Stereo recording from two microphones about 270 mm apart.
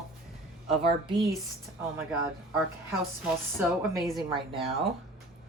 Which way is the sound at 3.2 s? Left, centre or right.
Centre.